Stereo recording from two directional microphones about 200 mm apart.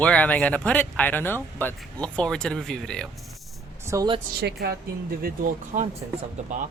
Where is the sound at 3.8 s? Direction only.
15° right (ahead or behind).